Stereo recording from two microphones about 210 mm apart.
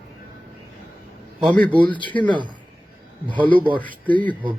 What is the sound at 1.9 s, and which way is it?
Speech, 20° left (ahead or behind).